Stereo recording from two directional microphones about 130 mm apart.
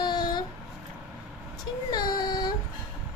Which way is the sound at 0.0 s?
35° left (ahead or behind).